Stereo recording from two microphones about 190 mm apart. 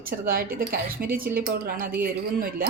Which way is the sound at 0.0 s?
50° right (ahead or behind).